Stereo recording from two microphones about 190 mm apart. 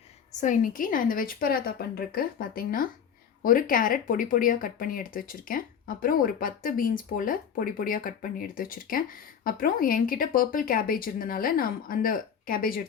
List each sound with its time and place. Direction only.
0.3 s speech: 40° left (ahead or behind)